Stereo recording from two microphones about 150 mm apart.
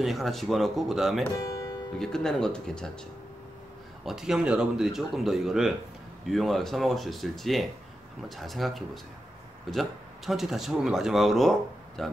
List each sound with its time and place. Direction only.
0.0 s speech: centre (ahead or behind)
1.3 s music: 20° left (ahead or behind)
2.0 s speech: 5° left (ahead or behind)
4.0 s speech: 5° right (ahead or behind)